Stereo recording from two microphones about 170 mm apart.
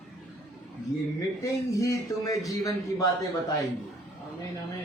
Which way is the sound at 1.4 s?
20° left (ahead or behind).